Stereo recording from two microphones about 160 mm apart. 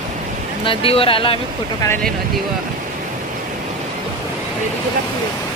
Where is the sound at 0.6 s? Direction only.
35° left (ahead or behind).